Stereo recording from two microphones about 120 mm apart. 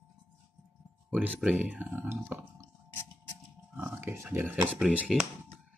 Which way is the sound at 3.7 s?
20° right (ahead or behind).